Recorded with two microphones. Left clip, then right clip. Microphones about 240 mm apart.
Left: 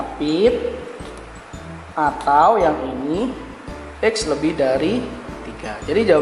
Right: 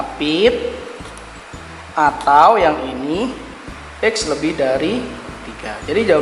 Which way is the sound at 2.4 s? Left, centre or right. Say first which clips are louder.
Right 3 dB; centre.